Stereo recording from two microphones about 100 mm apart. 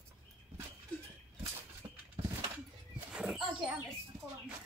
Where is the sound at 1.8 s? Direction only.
45° right (ahead or behind).